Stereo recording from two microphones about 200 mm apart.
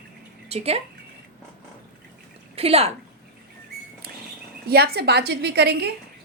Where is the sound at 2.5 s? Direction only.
30° right (ahead or behind).